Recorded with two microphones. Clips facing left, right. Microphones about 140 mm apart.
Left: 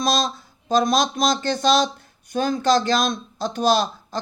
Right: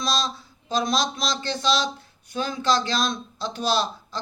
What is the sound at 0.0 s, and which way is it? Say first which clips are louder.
Speech: left 5 dB; 45° left (ahead or behind).